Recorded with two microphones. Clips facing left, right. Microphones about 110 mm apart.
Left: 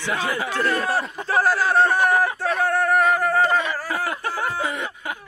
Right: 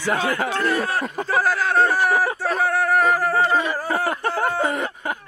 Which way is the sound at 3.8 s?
40° right (ahead or behind).